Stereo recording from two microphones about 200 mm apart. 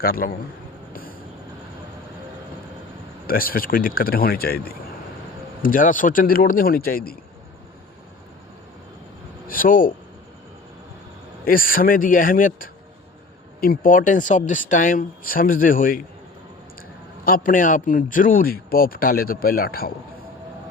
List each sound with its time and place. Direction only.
0.0 s speech: 45° left (ahead or behind)
3.2 s speech: 45° left (ahead or behind)
9.5 s speech: 45° left (ahead or behind)
11.4 s speech: 45° left (ahead or behind)
17.2 s speech: 45° left (ahead or behind)